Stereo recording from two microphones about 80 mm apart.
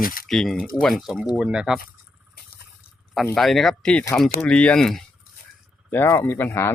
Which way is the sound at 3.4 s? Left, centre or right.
Centre.